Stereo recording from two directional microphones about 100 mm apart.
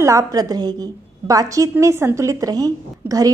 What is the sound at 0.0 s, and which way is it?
A woman's voice, 30° right (ahead or behind).